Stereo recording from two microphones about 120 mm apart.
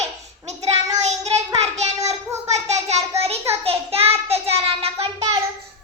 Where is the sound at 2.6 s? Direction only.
65° right (ahead or behind).